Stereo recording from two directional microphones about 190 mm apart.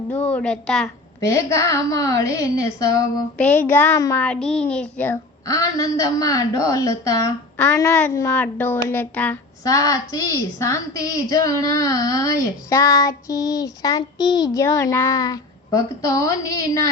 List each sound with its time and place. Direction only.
0.1 s a child's voice: 5° left (ahead or behind)
1.2 s female singing: 15° left (ahead or behind)
5.1 s female singing: 20° left (ahead or behind)